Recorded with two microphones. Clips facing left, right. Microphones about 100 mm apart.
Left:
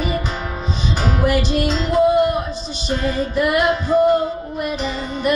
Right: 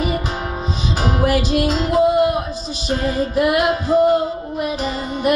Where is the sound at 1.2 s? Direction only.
20° right (ahead or behind).